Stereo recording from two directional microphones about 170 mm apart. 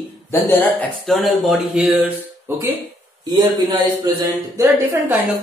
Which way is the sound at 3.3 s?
20° right (ahead or behind).